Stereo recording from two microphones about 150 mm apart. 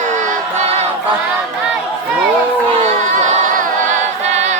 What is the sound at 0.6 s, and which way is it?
Choir, 45° right (ahead or behind).